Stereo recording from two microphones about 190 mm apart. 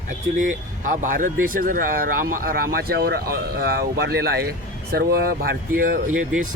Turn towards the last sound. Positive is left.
turn(degrees=-45)  # may be behind; listen again after turning